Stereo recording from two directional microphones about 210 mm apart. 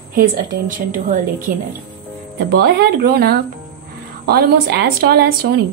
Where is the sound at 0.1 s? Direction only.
40° right (ahead or behind).